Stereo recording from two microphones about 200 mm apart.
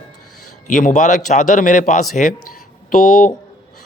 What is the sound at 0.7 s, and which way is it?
Speech, 40° left (ahead or behind).